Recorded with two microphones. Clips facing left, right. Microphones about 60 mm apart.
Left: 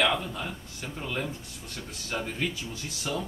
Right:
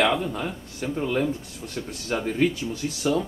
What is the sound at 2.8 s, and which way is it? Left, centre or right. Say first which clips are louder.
Speech: right 10 dB; centre.